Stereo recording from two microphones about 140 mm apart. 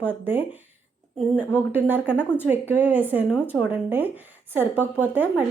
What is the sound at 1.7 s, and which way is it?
Speech, 15° right (ahead or behind).